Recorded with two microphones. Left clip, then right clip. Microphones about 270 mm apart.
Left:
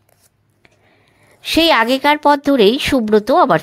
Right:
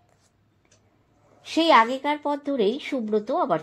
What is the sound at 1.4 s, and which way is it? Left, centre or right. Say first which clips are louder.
A woman's voice: left 5 dB; left.